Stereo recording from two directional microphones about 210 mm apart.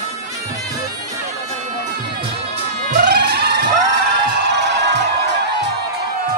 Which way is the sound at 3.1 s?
50° right (ahead or behind).